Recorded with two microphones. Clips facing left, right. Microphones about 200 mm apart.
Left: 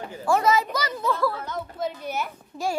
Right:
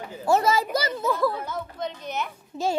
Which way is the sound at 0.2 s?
25° right (ahead or behind).